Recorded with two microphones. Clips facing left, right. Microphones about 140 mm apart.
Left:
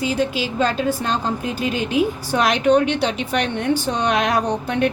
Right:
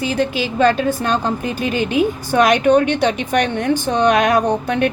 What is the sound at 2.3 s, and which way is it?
A woman's voice, 55° right (ahead or behind).